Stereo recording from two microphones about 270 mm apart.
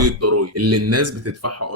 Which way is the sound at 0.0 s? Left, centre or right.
Right.